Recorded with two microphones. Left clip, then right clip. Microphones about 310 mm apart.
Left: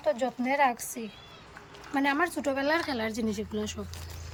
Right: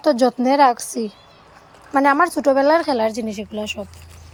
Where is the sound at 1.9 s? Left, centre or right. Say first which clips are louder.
Right 12 dB; right.